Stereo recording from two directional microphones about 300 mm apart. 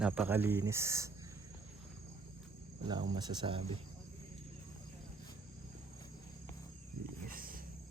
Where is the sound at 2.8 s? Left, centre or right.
Centre.